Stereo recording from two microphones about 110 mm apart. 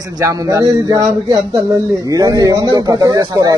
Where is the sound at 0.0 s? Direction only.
35° right (ahead or behind).